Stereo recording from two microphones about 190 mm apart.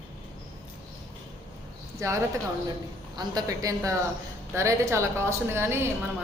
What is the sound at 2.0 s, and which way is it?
Speech, 15° right (ahead or behind).